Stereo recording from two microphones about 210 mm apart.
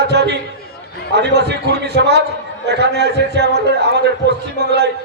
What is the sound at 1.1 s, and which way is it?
A man's voice, 55° right (ahead or behind).